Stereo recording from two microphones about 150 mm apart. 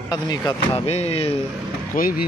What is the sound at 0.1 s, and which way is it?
Speech, 25° left (ahead or behind).